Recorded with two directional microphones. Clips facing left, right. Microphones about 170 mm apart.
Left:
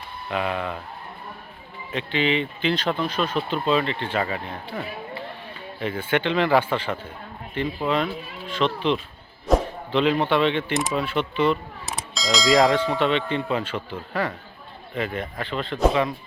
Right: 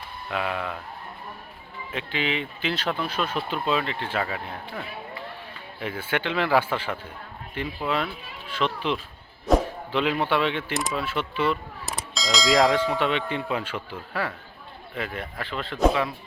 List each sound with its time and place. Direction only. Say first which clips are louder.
0.3 s speech: left 3 dB; centre (ahead or behind)
1.9 s speech: left 5 dB; 5° right (ahead or behind)